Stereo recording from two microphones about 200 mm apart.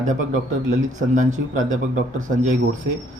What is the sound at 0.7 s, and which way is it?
Speech, 40° right (ahead or behind).